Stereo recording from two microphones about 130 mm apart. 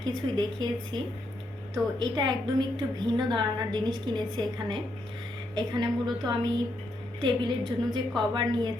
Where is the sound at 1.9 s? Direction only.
35° right (ahead or behind).